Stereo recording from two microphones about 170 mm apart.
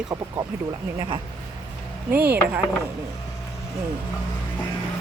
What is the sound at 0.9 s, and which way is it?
Speech, 30° right (ahead or behind).